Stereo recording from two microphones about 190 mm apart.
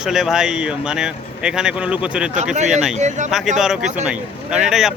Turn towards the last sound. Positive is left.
turn(degrees=0)  # may be behind; listen again after turning